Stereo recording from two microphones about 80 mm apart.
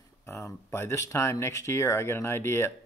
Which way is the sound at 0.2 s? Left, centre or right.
Left.